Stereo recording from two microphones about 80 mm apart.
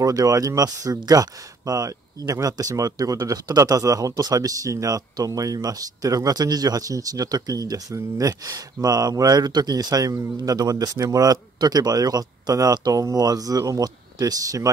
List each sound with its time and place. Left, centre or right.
0.0 s speech: right